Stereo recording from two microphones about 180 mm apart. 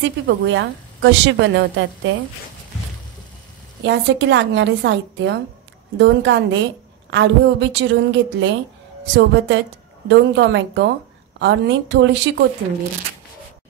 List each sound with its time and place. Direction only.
0.0 s a woman's voice: 90° right
3.8 s a woman's voice: 85° right